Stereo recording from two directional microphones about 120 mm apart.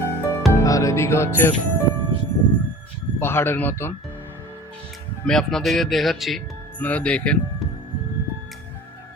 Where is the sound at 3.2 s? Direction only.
20° left (ahead or behind).